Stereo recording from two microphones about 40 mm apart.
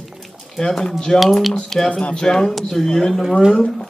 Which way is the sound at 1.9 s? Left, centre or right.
Left.